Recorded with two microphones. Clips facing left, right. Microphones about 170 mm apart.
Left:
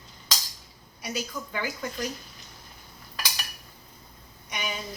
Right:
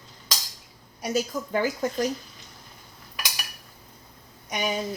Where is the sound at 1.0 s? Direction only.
40° right (ahead or behind).